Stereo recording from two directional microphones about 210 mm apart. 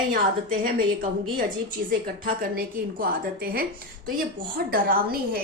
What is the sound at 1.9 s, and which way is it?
A woman's voice, 45° right (ahead or behind).